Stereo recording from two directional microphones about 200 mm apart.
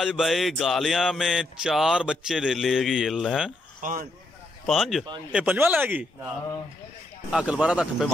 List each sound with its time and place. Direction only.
0.0 s music: centre (ahead or behind)
3.8 s speech: 45° right (ahead or behind)
4.6 s music: centre (ahead or behind)
5.3 s speech: 5° right (ahead or behind)
7.2 s music: 5° right (ahead or behind)